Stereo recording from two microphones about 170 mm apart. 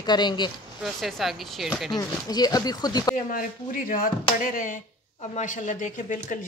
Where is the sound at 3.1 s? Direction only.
55° left (ahead or behind).